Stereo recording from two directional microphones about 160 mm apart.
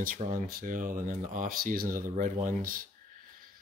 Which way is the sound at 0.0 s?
60° right (ahead or behind).